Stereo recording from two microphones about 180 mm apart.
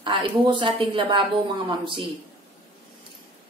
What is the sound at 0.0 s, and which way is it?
A woman's voice, 25° right (ahead or behind).